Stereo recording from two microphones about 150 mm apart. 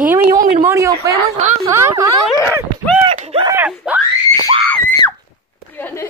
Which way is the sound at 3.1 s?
45° right (ahead or behind).